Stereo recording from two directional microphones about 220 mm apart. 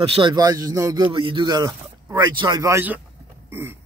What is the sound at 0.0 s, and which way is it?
A man's voice, 25° right (ahead or behind).